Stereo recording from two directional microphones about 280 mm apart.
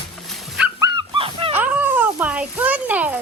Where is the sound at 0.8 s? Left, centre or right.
Centre.